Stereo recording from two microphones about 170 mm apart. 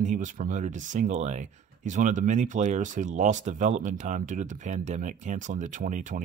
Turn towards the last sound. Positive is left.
turn(degrees=-50)  # may be behind; listen again after turning